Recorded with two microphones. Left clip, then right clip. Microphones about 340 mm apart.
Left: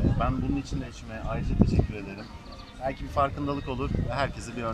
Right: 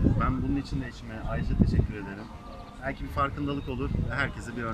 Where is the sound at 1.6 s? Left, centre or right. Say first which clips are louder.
Left 3 dB; left.